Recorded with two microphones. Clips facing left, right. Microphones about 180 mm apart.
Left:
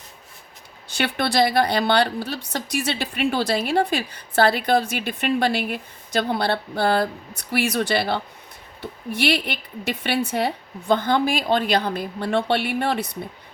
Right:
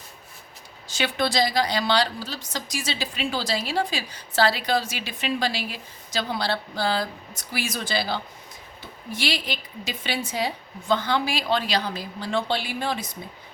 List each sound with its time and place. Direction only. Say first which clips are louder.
0.9 s a woman's voice: left 2 dB; 60° left (ahead or behind)